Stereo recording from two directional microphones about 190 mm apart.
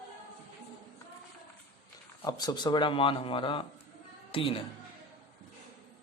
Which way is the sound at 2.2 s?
20° left (ahead or behind).